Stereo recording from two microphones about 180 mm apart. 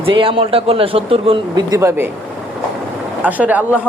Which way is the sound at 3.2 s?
10° right (ahead or behind).